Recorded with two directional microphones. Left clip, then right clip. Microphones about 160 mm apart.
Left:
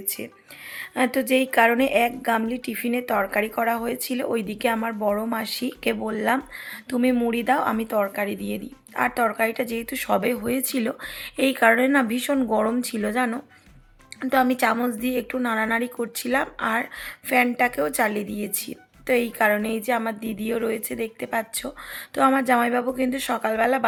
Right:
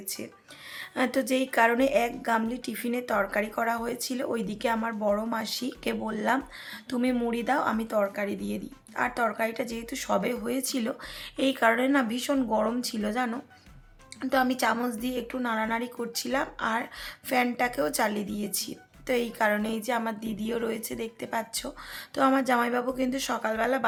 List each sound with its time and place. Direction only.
0.8 s a woman's voice: 20° left (ahead or behind)